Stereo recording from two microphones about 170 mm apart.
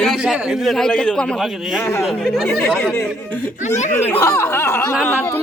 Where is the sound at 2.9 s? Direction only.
15° left (ahead or behind).